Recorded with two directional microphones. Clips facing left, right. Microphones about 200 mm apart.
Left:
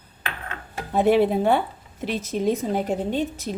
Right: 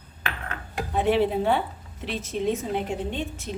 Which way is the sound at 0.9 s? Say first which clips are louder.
Left 4 dB; 45° left (ahead or behind).